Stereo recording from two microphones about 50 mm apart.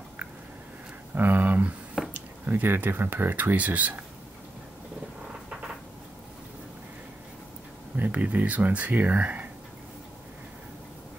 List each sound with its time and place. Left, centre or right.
1.1 s speech: right
7.9 s speech: right